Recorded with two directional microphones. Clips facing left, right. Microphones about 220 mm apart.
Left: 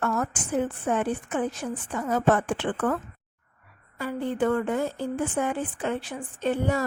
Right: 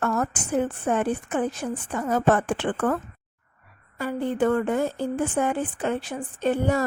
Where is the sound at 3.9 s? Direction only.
45° right (ahead or behind).